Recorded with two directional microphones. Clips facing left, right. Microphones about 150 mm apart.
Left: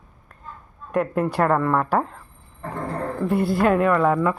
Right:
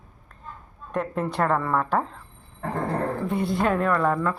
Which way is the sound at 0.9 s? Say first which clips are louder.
Left 5 dB; 10° left (ahead or behind).